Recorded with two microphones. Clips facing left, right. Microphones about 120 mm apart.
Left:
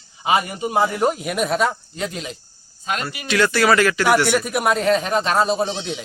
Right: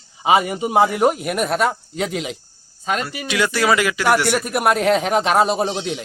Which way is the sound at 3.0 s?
10° right (ahead or behind).